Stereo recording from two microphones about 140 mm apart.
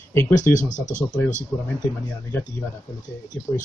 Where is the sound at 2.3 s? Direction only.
15° left (ahead or behind).